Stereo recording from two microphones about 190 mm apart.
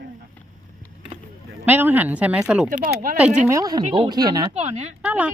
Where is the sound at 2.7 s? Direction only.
45° right (ahead or behind).